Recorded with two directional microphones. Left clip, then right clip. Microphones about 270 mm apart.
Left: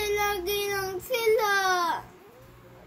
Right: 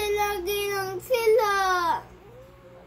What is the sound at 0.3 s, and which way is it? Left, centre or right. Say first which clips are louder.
Child singing: right 1 dB; centre.